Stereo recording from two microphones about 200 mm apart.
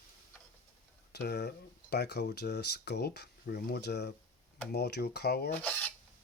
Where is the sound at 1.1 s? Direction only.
55° left (ahead or behind).